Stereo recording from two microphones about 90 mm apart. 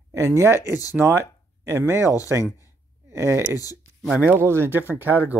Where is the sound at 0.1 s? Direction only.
30° right (ahead or behind).